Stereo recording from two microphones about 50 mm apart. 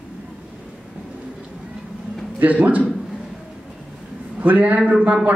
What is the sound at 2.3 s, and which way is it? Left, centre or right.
Speech, right.